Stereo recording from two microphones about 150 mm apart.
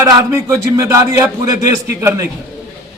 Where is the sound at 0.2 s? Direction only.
20° right (ahead or behind).